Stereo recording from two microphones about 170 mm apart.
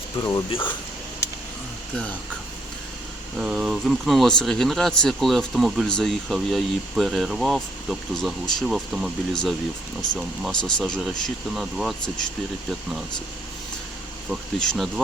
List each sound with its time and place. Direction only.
0.2 s speech: 25° left (ahead or behind)
3.3 s speech: 5° right (ahead or behind)
14.3 s speech: centre (ahead or behind)